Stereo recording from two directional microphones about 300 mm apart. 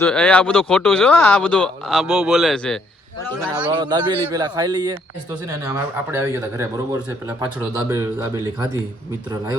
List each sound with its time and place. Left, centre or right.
0.0 s a man's voice: centre
3.5 s a man's voice: centre